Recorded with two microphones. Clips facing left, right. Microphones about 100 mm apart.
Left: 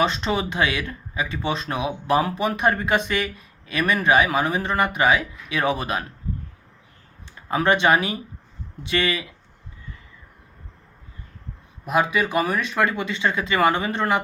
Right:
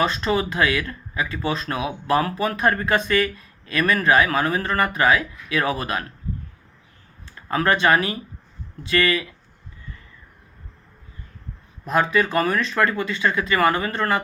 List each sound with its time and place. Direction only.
0.0 s speech: 20° left (ahead or behind)
7.3 s speech: 20° left (ahead or behind)
11.9 s speech: 10° left (ahead or behind)